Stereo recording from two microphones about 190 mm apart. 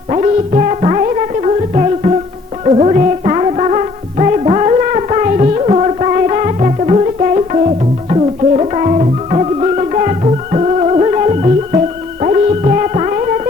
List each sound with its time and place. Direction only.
0.1 s music: 35° right (ahead or behind)